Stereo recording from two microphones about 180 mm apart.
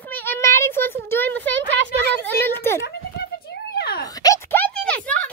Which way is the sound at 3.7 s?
60° left (ahead or behind).